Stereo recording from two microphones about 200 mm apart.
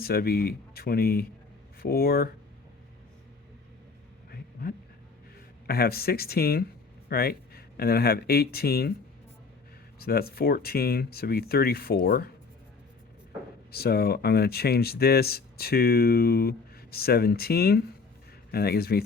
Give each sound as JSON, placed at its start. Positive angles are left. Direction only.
{"t": 0.0, "sound": "speech", "side_deg": 50}
{"t": 5.6, "sound": "speech", "side_deg": 50}
{"t": 10.0, "sound": "speech", "side_deg": 50}
{"t": 13.7, "sound": "speech", "side_deg": 50}